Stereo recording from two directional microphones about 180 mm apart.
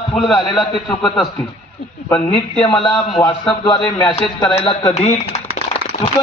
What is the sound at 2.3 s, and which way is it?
A man's voice, 30° left (ahead or behind).